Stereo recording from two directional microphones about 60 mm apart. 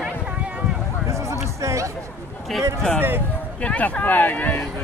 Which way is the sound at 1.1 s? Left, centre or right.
Right.